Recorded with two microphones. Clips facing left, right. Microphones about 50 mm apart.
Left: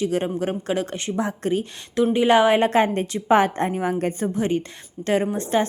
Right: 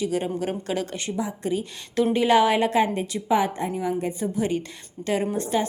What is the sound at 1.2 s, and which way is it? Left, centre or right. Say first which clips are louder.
Speech: left 4 dB; left.